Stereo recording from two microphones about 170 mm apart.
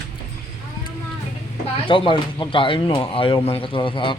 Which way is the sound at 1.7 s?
30° left (ahead or behind).